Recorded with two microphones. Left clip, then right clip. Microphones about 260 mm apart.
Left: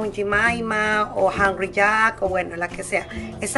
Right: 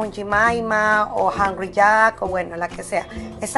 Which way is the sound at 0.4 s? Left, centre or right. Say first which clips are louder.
Right 5 dB; centre.